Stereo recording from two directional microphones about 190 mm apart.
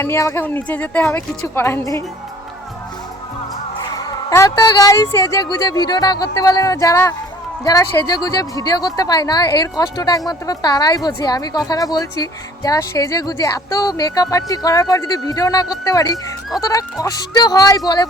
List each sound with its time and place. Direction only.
0.0 s speech: 15° left (ahead or behind)
3.9 s speech: 20° left (ahead or behind)